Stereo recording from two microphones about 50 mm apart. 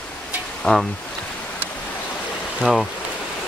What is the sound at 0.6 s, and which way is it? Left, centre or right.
Speech, centre.